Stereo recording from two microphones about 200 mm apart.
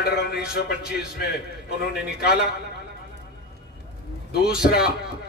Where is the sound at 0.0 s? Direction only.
50° left (ahead or behind).